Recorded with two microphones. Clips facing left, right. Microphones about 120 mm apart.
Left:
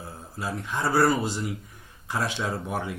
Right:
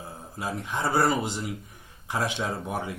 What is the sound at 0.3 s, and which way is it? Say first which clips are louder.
Speech: even; 15° right (ahead or behind).